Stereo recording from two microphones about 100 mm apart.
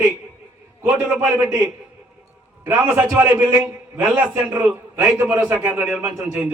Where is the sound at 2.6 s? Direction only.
15° right (ahead or behind).